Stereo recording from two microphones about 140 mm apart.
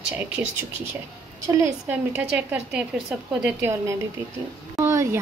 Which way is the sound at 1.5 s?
25° right (ahead or behind).